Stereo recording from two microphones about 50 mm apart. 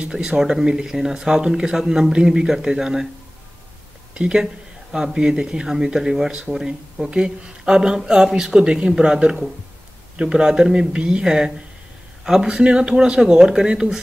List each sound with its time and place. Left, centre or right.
0.0 s speech: centre
4.1 s speech: centre